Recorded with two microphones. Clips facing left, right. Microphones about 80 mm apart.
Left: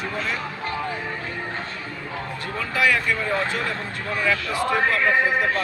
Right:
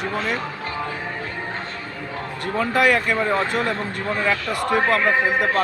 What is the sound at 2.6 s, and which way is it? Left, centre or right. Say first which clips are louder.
Speech: right 4 dB; right.